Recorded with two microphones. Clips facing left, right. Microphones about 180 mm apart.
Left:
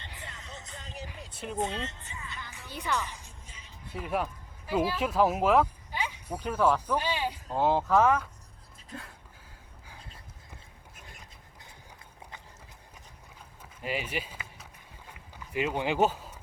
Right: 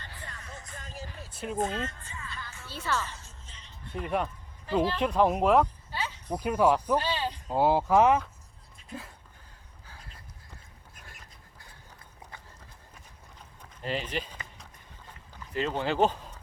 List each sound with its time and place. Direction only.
0.0 s music: 20° left (ahead or behind); by 5.6 s centre (ahead or behind)
5.9 s a sound: 15° left (ahead or behind)
6.3 s speech: 10° right (ahead or behind)
6.9 s speech: 10° left (ahead or behind)
7.4 s speech: 10° right (ahead or behind)
8.9 s speech: centre (ahead or behind)
13.6 s run: 10° left (ahead or behind)
15.5 s speech: 10° left (ahead or behind)